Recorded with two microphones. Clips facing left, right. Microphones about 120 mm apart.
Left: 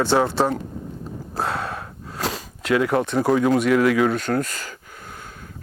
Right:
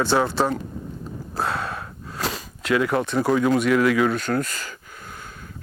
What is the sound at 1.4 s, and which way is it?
Gasp, 45° left (ahead or behind).